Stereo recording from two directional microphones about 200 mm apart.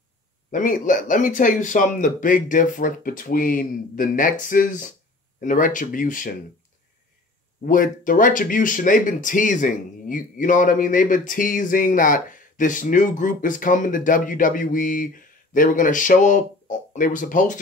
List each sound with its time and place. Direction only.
0.5 s speech: 40° left (ahead or behind)
7.6 s speech: 40° left (ahead or behind)